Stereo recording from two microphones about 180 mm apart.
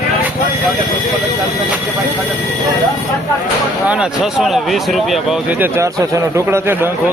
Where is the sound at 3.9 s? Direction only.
5° right (ahead or behind).